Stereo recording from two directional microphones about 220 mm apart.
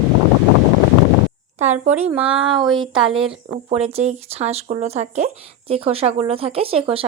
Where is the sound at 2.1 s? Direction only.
5° right (ahead or behind).